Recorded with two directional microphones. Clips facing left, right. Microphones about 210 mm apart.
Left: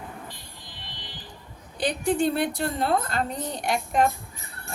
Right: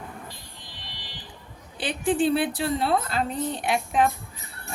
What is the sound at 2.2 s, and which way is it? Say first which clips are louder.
A woman's voice: right 1 dB; 5° right (ahead or behind).